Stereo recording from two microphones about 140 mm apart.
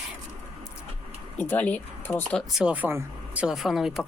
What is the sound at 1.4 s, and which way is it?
Speech, 10° left (ahead or behind).